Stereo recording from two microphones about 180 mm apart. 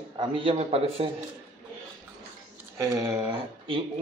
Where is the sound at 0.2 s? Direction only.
30° right (ahead or behind).